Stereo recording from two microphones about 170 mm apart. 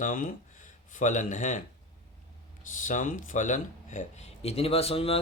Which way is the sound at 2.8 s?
50° left (ahead or behind).